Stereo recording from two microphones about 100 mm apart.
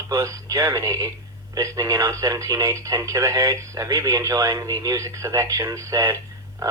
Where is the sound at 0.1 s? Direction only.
30° right (ahead or behind).